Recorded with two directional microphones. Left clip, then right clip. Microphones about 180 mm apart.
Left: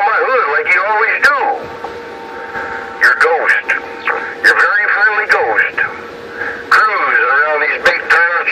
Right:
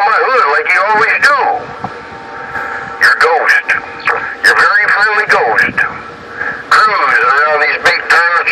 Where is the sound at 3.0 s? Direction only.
45° right (ahead or behind).